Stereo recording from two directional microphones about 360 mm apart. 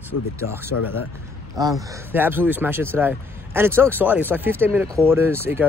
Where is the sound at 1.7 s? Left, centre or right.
Centre.